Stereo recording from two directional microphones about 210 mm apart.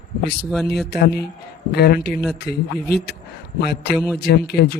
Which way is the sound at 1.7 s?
50° left (ahead or behind).